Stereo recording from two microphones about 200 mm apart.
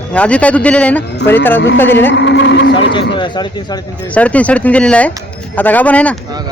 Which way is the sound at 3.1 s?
25° left (ahead or behind).